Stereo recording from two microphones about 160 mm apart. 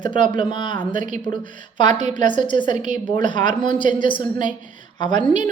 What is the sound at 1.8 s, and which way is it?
A woman's voice, 30° left (ahead or behind).